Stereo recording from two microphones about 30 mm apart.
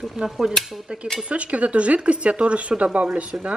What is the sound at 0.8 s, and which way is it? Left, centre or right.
Dishes, right.